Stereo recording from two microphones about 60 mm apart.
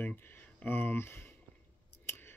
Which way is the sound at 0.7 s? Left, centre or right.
Left.